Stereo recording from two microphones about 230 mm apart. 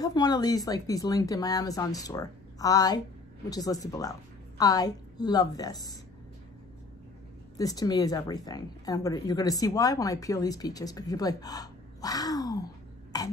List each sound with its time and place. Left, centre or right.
0.0 s a woman's voice: centre
7.5 s a woman's voice: centre
13.1 s a sound: centre